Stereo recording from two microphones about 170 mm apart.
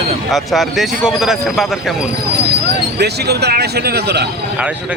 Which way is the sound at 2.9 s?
75° right (ahead or behind).